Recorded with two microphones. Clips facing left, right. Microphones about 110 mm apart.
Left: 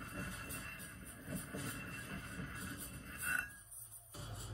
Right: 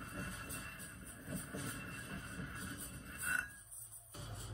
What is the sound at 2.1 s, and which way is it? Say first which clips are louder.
Music: even; 25° right (ahead or behind).